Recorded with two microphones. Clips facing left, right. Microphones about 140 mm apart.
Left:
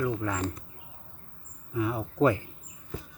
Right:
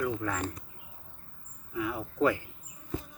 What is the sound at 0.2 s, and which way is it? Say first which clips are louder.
Speech: left 2 dB; 20° left (ahead or behind).